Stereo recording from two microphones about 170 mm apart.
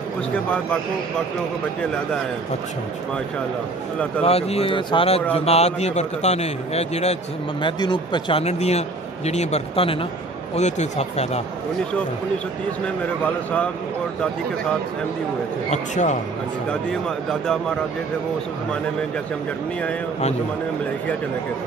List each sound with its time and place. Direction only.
4.2 s a man's voice: 35° left (ahead or behind)
7.6 s a man's voice: 25° left (ahead or behind)
15.7 s a man's voice: 45° left (ahead or behind)
16.9 s speech: 5° left (ahead or behind)